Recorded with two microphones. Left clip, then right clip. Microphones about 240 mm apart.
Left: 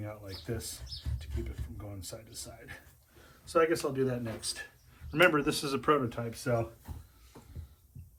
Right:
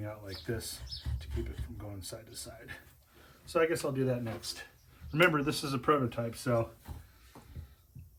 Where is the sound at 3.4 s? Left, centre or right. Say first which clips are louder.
Left 2 dB; centre.